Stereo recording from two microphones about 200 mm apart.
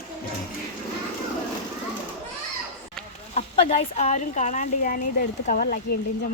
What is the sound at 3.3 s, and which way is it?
Speech, 35° left (ahead or behind).